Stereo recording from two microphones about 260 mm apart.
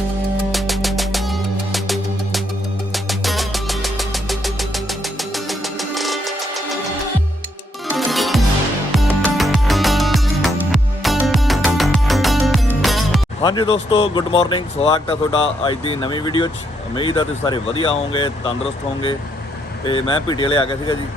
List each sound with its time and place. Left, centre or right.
0.5 s music: centre
7.9 s music: centre
13.4 s speech: centre